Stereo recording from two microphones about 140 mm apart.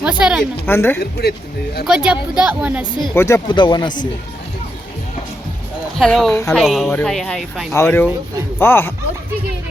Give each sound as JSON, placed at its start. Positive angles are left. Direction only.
{"t": 0.0, "sound": "a woman's voice", "side_deg": -5}
{"t": 0.6, "sound": "a woman's voice", "side_deg": 15}
{"t": 1.8, "sound": "a woman's voice", "side_deg": -5}
{"t": 3.2, "sound": "speech", "side_deg": 20}
{"t": 3.5, "sound": "speech", "side_deg": 35}
{"t": 6.0, "sound": "speech", "side_deg": 0}
{"t": 7.7, "sound": "a woman's voice", "side_deg": 15}